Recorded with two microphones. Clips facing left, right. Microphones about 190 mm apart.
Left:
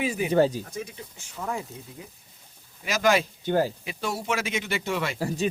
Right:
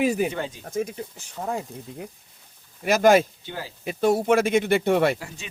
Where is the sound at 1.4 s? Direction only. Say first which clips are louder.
Right 3 dB; 40° right (ahead or behind).